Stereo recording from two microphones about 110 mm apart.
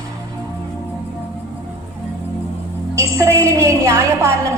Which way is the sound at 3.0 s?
25° right (ahead or behind).